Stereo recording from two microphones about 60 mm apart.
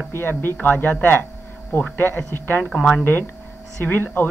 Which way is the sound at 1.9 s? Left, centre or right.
Left.